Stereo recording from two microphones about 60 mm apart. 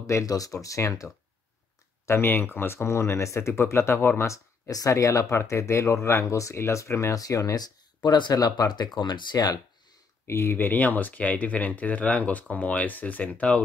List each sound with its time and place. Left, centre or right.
0.0 s speech: left
2.0 s speech: left
4.6 s speech: left
7.2 s speech: left
8.3 s speech: left
9.3 s speech: left
10.2 s speech: left; by 13.6 s centre